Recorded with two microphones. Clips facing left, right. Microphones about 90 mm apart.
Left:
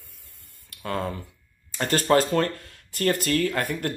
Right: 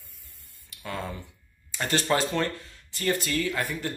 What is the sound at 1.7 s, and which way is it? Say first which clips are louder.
Speech: left 5 dB; 40° left (ahead or behind).